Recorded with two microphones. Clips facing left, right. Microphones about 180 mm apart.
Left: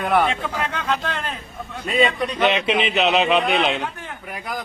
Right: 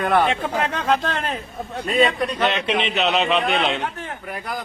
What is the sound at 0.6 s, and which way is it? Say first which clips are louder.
A man's voice: right 4 dB; 35° right (ahead or behind).